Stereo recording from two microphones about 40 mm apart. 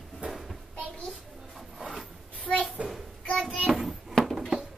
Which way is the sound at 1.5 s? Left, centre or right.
Centre.